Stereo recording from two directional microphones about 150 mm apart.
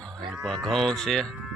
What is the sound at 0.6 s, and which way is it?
Speech, centre (ahead or behind).